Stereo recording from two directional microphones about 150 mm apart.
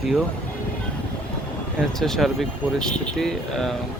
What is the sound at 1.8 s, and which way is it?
Speech, centre (ahead or behind).